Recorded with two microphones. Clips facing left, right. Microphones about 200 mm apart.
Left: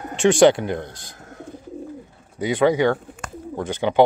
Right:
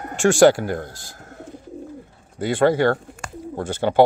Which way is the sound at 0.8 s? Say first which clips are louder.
Even; 20° left (ahead or behind).